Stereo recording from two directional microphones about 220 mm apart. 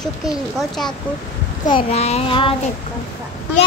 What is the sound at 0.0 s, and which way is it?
Speech, centre (ahead or behind).